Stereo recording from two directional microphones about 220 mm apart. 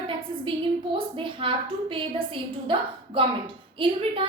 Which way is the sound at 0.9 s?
25° right (ahead or behind).